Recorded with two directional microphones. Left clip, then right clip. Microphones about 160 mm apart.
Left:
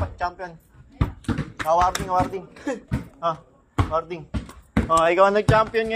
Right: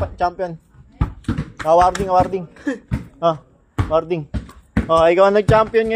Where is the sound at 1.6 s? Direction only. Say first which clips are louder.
Right 6 dB; 60° right (ahead or behind).